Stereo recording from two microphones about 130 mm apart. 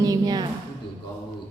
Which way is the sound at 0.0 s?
30° right (ahead or behind).